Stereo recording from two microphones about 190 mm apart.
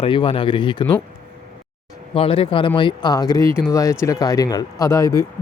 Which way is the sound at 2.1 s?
30° left (ahead or behind).